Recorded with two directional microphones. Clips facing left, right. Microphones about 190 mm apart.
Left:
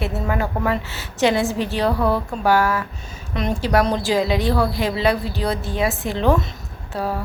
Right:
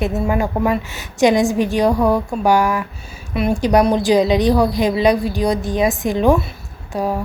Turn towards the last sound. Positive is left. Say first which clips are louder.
# right 4 dB
turn(degrees=-15)  # may be behind; listen again after turning